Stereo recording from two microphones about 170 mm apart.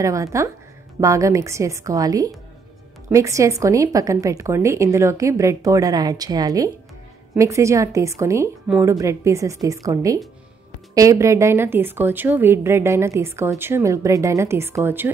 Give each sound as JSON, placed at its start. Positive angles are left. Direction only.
{"t": 0.0, "sound": "a woman's voice", "side_deg": -20}